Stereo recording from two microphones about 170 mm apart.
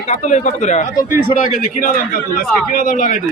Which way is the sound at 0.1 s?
45° left (ahead or behind).